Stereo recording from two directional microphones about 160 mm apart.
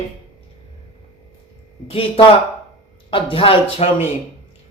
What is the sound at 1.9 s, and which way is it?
Mantra, 35° left (ahead or behind).